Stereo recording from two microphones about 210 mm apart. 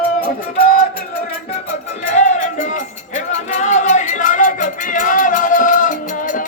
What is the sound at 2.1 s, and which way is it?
Music, 35° left (ahead or behind).